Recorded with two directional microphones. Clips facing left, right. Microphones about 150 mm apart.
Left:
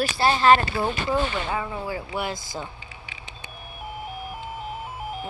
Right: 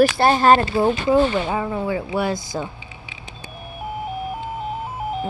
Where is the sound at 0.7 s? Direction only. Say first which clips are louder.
Right 7 dB; 20° right (ahead or behind).